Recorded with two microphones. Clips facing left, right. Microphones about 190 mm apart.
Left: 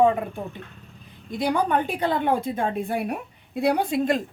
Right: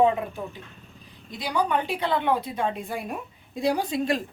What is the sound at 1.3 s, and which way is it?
A woman's voice, 55° left (ahead or behind).